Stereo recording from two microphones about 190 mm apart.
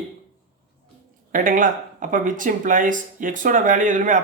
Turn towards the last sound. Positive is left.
turn(degrees=-45)  # may be behind; listen again after turning